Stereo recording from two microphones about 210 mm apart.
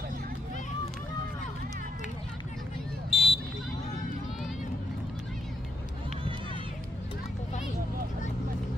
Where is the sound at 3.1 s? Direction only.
25° left (ahead or behind).